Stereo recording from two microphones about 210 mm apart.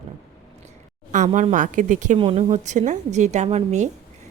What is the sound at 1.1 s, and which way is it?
A woman's voice, 35° right (ahead or behind).